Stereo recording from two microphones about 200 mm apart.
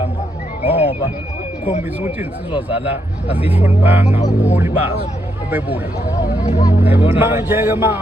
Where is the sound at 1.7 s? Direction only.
35° left (ahead or behind).